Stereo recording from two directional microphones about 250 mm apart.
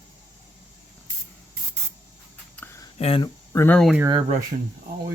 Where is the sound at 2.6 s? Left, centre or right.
Centre.